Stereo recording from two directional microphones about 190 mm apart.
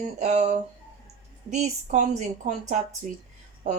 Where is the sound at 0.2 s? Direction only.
35° right (ahead or behind).